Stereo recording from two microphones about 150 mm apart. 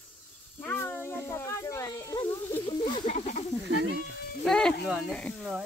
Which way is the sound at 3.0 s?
50° left (ahead or behind).